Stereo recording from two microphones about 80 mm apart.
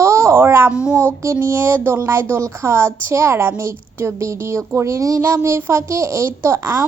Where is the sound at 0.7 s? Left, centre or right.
Centre.